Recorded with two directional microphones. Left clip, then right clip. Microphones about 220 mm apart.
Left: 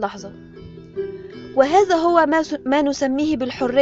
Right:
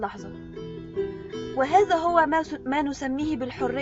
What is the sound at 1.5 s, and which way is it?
A woman's voice, 45° left (ahead or behind).